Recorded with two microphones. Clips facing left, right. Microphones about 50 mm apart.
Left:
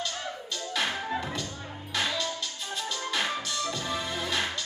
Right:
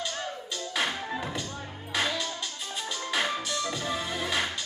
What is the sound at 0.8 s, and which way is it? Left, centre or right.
Music, centre.